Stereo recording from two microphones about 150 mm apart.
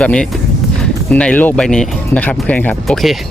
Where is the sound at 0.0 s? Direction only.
5° left (ahead or behind).